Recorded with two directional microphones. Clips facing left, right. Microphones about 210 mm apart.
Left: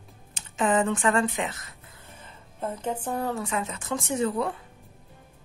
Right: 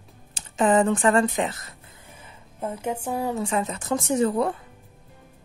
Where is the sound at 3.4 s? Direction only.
35° right (ahead or behind).